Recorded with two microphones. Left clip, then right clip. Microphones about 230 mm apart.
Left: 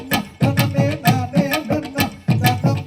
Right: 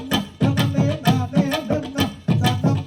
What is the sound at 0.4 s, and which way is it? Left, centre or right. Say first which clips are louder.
Music: left 3 dB; left.